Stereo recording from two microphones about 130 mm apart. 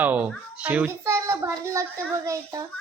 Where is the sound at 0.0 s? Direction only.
10° right (ahead or behind); by 2.6 s 25° right (ahead or behind).